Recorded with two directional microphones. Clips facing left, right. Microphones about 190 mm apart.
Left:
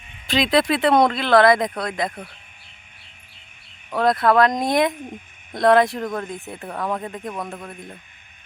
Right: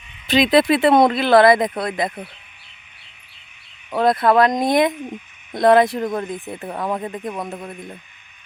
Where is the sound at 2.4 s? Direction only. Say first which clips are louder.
Even; 45° left (ahead or behind).